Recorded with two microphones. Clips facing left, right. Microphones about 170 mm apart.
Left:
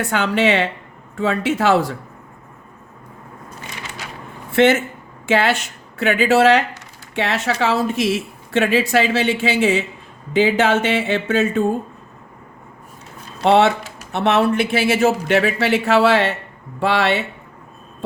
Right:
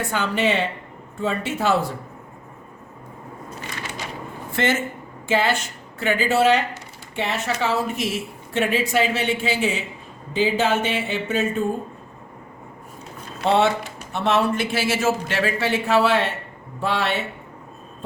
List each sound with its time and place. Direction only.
0.0 s a woman's voice: 75° left (ahead or behind)
4.5 s a woman's voice: 65° left (ahead or behind); by 11.6 s 90° left
13.4 s speech: 80° left